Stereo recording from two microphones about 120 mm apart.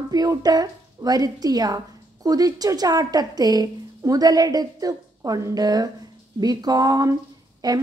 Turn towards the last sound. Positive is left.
turn(degrees=-35)  # may be behind; listen again after turning